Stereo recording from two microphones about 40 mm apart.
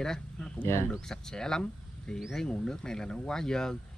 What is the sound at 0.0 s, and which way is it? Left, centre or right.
Speech, centre.